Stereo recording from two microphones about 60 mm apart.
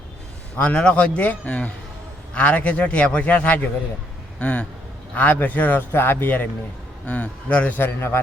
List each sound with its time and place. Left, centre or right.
0.6 s a man's voice: centre
5.9 s a man's voice: left
7.8 s a man's voice: left